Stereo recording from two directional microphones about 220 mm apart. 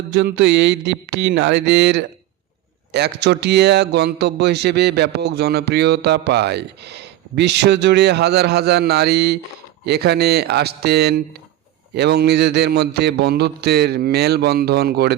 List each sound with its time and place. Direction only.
0.1 s a man's voice: 55° right (ahead or behind)